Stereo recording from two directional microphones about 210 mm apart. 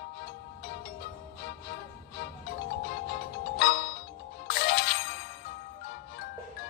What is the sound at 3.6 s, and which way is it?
Music, 50° left (ahead or behind).